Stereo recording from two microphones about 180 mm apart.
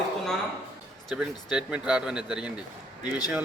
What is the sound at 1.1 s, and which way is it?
Speech, 5° right (ahead or behind).